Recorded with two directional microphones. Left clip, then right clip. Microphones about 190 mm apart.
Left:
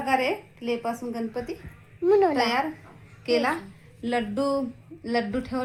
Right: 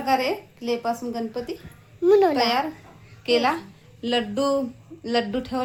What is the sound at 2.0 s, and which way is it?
Speech, 15° right (ahead or behind).